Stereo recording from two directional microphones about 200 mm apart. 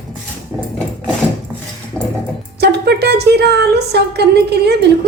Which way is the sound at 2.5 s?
55° right (ahead or behind).